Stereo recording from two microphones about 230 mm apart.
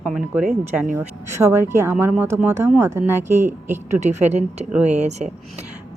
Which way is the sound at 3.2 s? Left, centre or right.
Right.